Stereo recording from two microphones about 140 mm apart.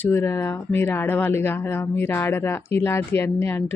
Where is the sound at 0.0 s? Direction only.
15° left (ahead or behind).